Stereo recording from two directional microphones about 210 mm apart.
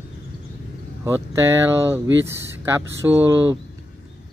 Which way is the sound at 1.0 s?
10° right (ahead or behind).